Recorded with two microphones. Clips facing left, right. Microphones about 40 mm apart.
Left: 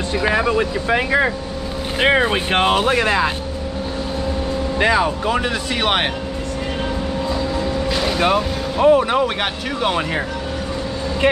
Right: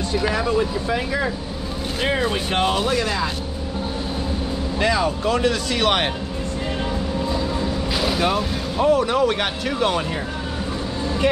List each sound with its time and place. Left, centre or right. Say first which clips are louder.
0.1 s speech: left 4 dB; left
4.7 s speech: left 3 dB; left
7.9 s vehicle: even; centre
8.2 s speech: left 4 dB; centre
9.2 s speech: even; centre